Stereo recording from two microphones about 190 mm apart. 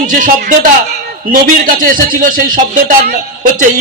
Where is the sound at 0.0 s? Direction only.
45° right (ahead or behind).